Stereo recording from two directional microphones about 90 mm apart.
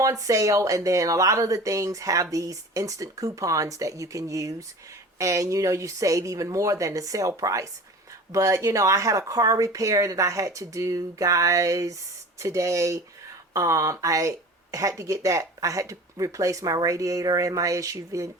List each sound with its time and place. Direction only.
0.0 s speech: 35° right (ahead or behind)